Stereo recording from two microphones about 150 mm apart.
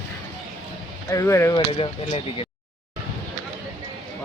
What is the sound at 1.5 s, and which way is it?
Speech, 40° left (ahead or behind).